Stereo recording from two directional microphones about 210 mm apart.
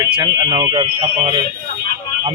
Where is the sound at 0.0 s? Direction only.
20° right (ahead or behind).